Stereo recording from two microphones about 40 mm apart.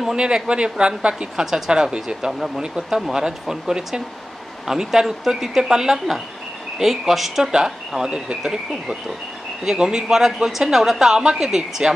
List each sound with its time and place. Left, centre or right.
0.1 s a woman's voice: right
1.4 s a woman's voice: centre